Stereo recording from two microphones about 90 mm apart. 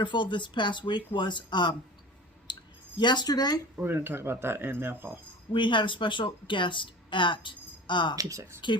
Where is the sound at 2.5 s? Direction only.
55° left (ahead or behind).